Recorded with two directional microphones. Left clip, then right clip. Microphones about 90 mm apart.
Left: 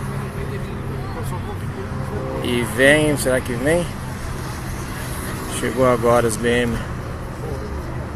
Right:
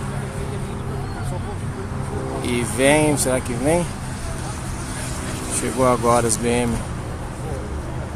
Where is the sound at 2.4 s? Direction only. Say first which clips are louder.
Left 3 dB; 20° right (ahead or behind).